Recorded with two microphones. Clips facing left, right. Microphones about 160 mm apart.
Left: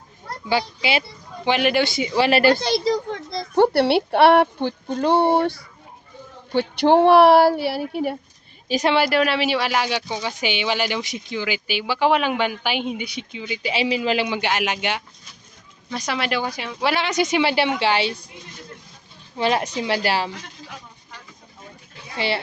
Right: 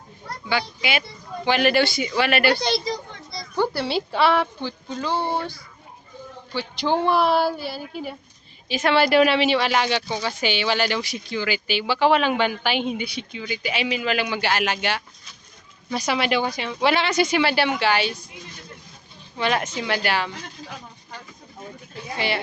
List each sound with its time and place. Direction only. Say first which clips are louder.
0.4 s a child's voice: left 3 dB; 35° left (ahead or behind)
1.5 s speech: even; 20° left (ahead or behind); by 2.6 s 35° left (ahead or behind)
3.5 s a woman's voice: left 7 dB; 70° left (ahead or behind)
8.8 s speech: even; 20° left (ahead or behind)
9.0 s speech: right 3 dB; centre (ahead or behind); by 15.0 s 15° left (ahead or behind)
15.9 s speech: right 2 dB; 5° right (ahead or behind)
17.1 s speech: even; 20° left (ahead or behind)
19.4 s a child's voice: left 3 dB; 30° left (ahead or behind)